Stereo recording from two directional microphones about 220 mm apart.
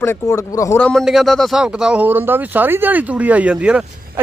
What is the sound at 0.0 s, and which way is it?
Speech, 10° left (ahead or behind).